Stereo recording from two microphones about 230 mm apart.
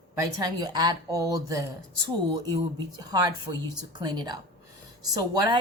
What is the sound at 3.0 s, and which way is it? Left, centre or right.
A woman's voice, centre.